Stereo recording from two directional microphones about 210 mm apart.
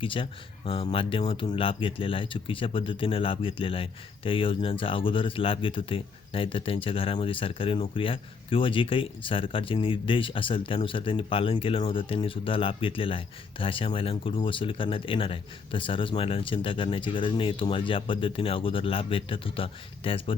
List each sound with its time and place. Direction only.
0.0 s speech: 25° left (ahead or behind)